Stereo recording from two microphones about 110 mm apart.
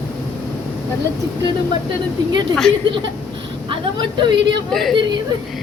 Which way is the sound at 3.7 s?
45° right (ahead or behind).